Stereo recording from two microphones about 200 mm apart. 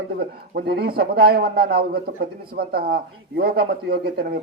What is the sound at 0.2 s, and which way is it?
A man's voice, 50° right (ahead or behind).